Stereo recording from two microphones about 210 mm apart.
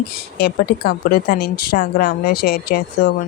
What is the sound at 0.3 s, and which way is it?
A woman's voice, 50° left (ahead or behind).